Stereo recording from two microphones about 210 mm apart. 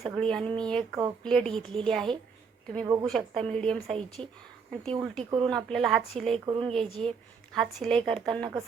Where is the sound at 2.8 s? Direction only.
15° right (ahead or behind).